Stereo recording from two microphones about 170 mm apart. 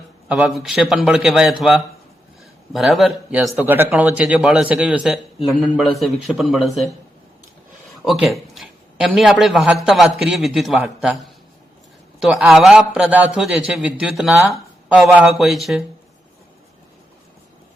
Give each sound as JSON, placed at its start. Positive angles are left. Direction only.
{"t": 0.3, "sound": "a man's voice", "side_deg": -5}
{"t": 3.5, "sound": "a man's voice", "side_deg": -10}
{"t": 8.0, "sound": "a man's voice", "side_deg": 0}
{"t": 12.2, "sound": "a man's voice", "side_deg": 0}